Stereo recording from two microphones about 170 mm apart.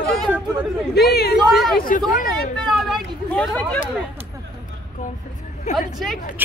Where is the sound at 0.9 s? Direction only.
70° left (ahead or behind).